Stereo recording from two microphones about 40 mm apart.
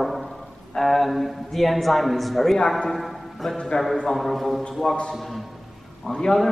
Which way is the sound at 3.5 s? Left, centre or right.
Left.